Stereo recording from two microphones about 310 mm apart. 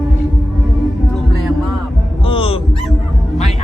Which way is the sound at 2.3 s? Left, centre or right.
Centre.